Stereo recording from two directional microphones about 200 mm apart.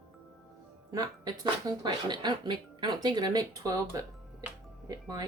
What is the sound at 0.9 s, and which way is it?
Speech, 20° right (ahead or behind).